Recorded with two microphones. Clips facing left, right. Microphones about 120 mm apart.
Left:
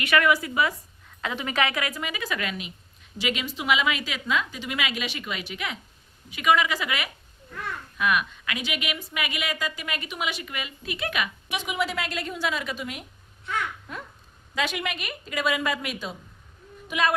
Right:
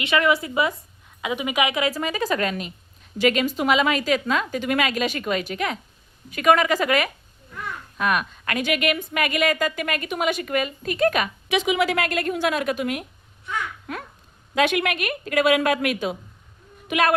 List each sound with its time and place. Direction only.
0.0 s a woman's voice: 25° right (ahead or behind)
1.2 s speech: 15° right (ahead or behind)
1.9 s a woman's voice: 35° right (ahead or behind)
11.4 s a woman's voice: 90° right; by 13.1 s 60° right (ahead or behind)
13.9 s a sound: 75° right (ahead or behind)
14.5 s a woman's voice: 60° right (ahead or behind)